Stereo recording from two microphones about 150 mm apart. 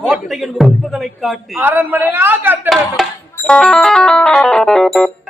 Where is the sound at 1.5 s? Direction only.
15° right (ahead or behind).